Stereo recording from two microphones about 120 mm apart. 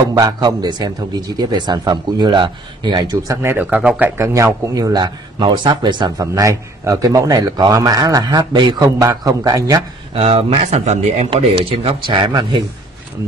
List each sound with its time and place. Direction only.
0.1 s a man's voice: 35° right (ahead or behind)
3.4 s speech: 15° right (ahead or behind)
4.2 s a man's voice: 25° right (ahead or behind); by 8.8 s 40° right (ahead or behind)
8.8 s a man's voice: 30° right (ahead or behind)
10.1 s speech: 55° right (ahead or behind)
11.3 s speech: 55° right (ahead or behind)